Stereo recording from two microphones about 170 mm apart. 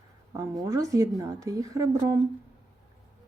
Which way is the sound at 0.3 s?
20° right (ahead or behind).